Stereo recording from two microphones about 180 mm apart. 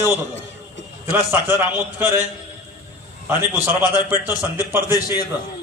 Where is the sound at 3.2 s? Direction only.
10° right (ahead or behind).